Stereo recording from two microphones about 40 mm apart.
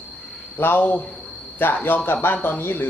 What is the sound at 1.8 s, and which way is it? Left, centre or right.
Speech, left.